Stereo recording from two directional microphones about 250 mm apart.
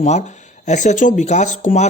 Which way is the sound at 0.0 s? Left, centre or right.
Left.